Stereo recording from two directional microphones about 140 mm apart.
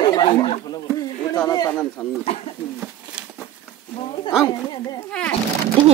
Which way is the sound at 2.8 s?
5° right (ahead or behind).